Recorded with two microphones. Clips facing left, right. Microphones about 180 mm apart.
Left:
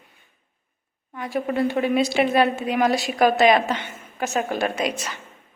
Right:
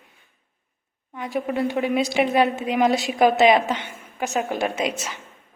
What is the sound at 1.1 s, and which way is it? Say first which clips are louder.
A woman's voice: left 1 dB; 15° right (ahead or behind).